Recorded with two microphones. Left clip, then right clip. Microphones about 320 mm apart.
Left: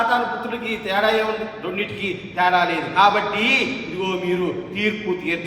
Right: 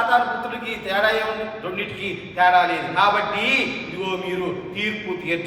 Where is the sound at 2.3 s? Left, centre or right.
Left.